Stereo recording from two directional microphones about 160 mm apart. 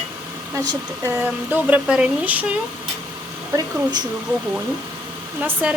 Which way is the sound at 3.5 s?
25° right (ahead or behind).